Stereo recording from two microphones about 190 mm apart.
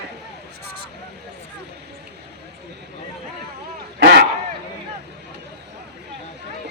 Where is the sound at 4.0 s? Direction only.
60° right (ahead or behind).